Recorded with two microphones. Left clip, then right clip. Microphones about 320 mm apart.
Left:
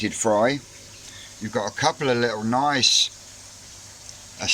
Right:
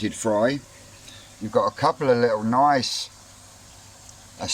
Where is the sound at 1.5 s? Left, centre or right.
Centre.